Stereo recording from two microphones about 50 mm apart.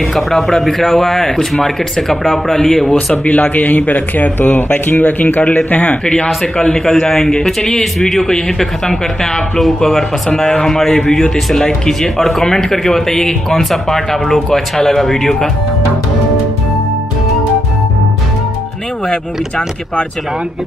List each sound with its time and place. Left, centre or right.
0.1 s a man's voice: centre
2.5 s a man's voice: centre
3.3 s a man's voice: left
6.0 s a man's voice: centre